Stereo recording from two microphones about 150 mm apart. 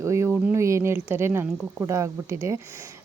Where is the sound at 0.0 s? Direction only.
20° right (ahead or behind).